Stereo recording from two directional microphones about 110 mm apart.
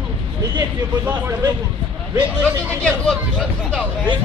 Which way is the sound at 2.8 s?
10° left (ahead or behind).